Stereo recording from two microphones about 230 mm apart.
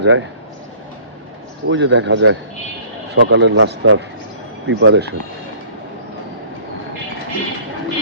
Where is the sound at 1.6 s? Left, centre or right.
Right.